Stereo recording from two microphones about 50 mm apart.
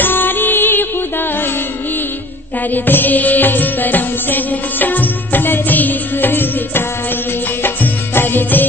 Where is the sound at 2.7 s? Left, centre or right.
Left.